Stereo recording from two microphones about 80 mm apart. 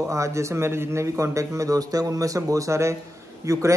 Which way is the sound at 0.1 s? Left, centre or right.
Right.